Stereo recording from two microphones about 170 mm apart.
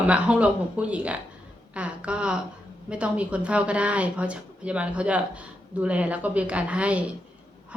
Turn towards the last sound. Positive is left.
turn(degrees=-5)  # may be behind; listen again after turning